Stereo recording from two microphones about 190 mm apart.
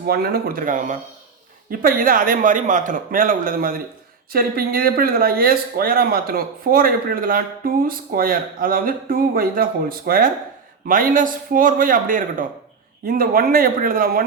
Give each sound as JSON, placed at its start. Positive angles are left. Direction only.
{"t": 0.0, "sound": "speech", "side_deg": -55}